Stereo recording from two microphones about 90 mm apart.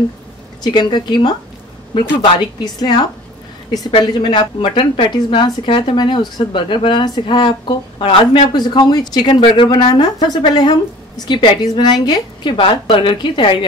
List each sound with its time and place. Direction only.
0.7 s a woman's voice: 55° left (ahead or behind)
2.6 s a woman's voice: 50° left (ahead or behind)
4.0 s a woman's voice: 60° left (ahead or behind)